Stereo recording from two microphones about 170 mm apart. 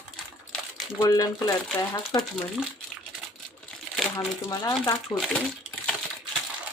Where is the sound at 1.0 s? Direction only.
20° left (ahead or behind).